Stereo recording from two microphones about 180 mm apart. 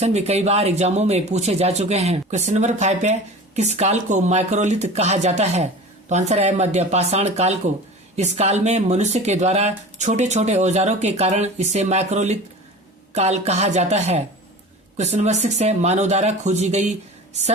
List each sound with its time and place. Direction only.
0.0 s speech: 35° right (ahead or behind)